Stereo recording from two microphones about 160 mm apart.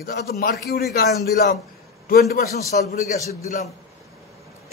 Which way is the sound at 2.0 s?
70° left (ahead or behind).